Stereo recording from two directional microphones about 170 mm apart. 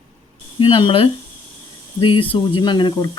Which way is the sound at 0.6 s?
30° left (ahead or behind).